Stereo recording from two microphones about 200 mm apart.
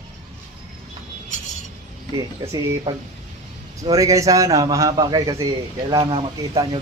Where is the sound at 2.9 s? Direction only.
20° right (ahead or behind).